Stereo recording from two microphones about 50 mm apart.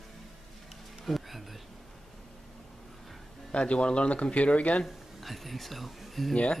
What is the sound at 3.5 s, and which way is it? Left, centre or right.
Speech, left.